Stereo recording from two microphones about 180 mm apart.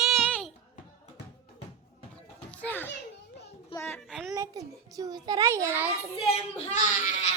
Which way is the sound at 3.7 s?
15° left (ahead or behind).